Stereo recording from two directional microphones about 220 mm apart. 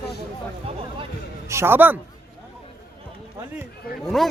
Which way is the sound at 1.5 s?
10° right (ahead or behind).